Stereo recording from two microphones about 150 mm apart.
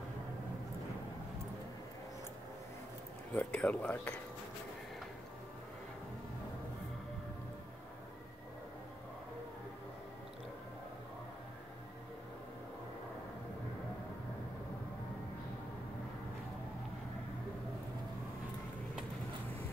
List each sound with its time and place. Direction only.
3.3 s speech: 10° left (ahead or behind)